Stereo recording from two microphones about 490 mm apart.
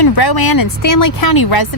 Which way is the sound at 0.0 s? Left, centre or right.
Left.